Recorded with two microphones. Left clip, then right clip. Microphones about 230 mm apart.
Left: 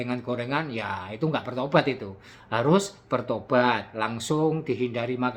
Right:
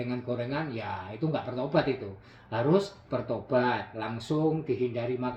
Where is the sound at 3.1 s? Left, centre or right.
Centre.